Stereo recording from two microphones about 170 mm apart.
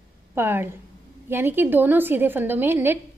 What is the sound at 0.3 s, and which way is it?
A woman's voice, 15° right (ahead or behind).